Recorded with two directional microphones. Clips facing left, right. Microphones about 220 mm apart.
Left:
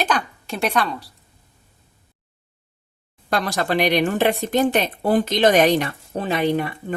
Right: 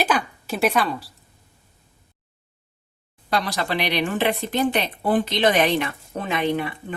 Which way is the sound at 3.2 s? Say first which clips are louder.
Left 2 dB; 50° left (ahead or behind).